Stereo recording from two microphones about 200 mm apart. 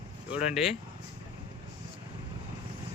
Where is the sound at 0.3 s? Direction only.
5° right (ahead or behind).